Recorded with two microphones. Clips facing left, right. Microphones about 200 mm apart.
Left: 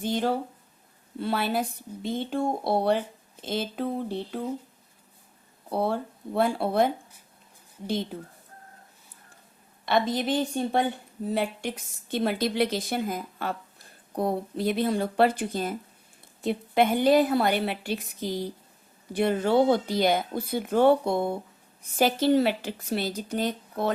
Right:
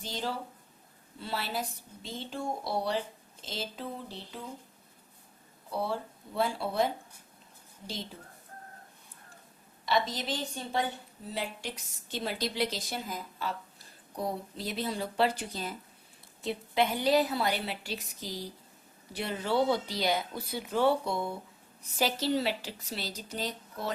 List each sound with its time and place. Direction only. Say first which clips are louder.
0.0 s a woman's voice: left 10 dB; 55° left (ahead or behind)
5.7 s a woman's voice: left 6 dB; 55° left (ahead or behind)
9.8 s a woman's voice: left 6 dB; 55° left (ahead or behind)